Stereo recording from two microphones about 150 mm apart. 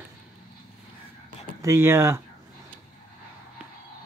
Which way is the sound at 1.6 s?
20° right (ahead or behind).